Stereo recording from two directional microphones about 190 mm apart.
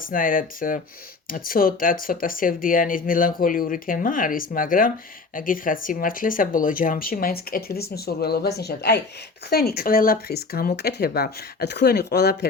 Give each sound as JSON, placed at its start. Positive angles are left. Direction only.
{"t": 0.0, "sound": "speech", "side_deg": 45}